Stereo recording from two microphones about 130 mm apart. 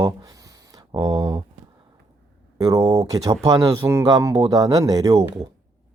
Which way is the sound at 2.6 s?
25° right (ahead or behind).